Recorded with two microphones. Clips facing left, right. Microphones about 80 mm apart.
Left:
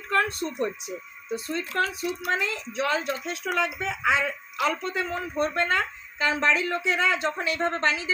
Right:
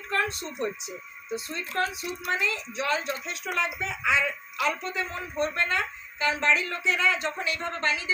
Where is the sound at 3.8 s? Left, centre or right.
Left.